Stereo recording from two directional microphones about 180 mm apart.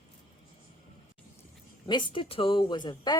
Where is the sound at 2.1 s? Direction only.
30° left (ahead or behind).